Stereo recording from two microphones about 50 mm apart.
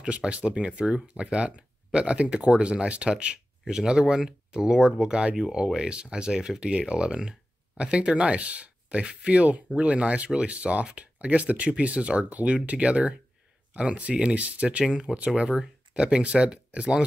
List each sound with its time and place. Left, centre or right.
0.0 s speech: right